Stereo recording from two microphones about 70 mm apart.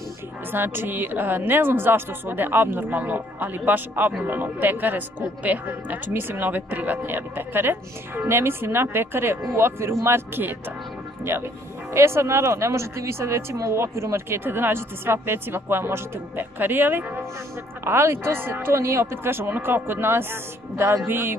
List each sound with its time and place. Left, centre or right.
0.5 s speech: right